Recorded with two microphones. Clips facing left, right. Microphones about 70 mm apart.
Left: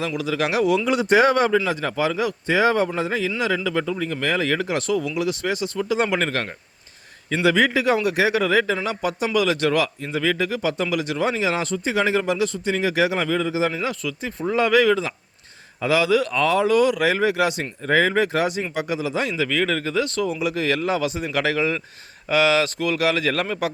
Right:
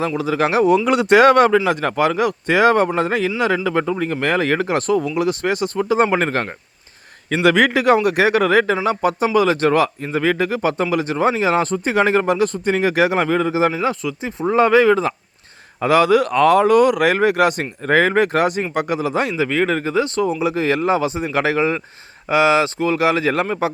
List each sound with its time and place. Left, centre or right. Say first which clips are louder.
0.0 s speech: right 5 dB; right
0.9 s speech: right 5 dB; right
7.4 s speech: right 4 dB; right
13.8 s speech: right 5 dB; right
14.4 s speech: right 5 dB; right
15.8 s speech: right 5 dB; right
19.4 s speech: right 4 dB; right